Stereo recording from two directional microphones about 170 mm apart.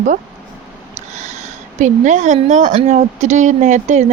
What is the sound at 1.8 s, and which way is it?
Speech, 45° right (ahead or behind).